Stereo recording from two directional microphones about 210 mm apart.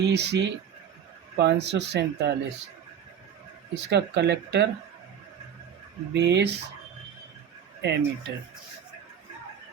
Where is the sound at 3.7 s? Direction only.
55° right (ahead or behind).